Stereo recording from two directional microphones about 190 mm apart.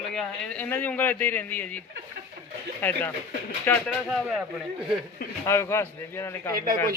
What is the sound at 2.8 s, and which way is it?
A man's voice, 10° left (ahead or behind).